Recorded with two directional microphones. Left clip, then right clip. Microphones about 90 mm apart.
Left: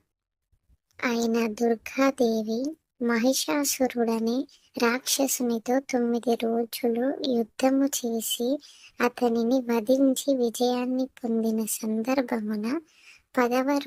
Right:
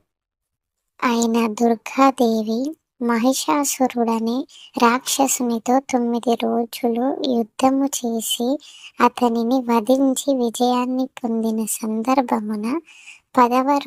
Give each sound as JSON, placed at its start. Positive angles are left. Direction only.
{"t": 0.9, "sound": "a child's voice", "side_deg": -50}